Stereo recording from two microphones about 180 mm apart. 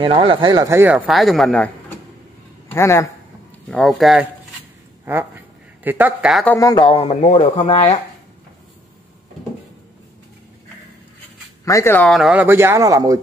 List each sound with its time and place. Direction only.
0.0 s speech: 30° right (ahead or behind)
0.9 s speech: centre (ahead or behind)
2.7 s speech: 15° left (ahead or behind)
3.7 s speech: centre (ahead or behind)
5.9 s speech: 10° right (ahead or behind)
6.4 s speech: 10° left (ahead or behind)
6.7 s speech: 30° left (ahead or behind)
11.6 s speech: 15° left (ahead or behind)
12.1 s speech: 5° right (ahead or behind); by 13.2 s 20° right (ahead or behind)